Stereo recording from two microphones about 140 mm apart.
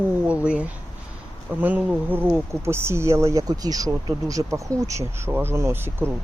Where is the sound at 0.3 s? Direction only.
10° right (ahead or behind).